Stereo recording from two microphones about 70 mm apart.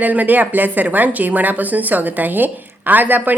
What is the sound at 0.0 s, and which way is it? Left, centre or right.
A woman's voice, right.